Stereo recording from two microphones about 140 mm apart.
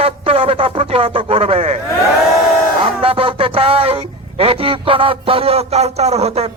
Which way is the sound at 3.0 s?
40° right (ahead or behind).